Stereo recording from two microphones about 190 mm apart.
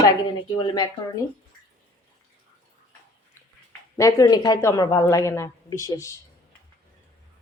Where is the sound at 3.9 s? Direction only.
15° left (ahead or behind).